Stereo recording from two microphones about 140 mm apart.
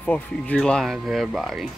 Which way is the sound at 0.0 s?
10° left (ahead or behind).